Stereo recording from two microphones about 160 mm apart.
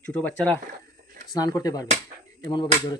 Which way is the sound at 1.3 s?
25° left (ahead or behind).